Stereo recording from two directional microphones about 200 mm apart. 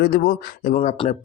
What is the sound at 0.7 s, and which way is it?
Speech, 35° left (ahead or behind).